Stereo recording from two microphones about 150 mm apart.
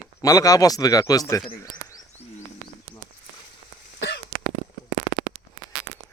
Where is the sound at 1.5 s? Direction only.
25° left (ahead or behind).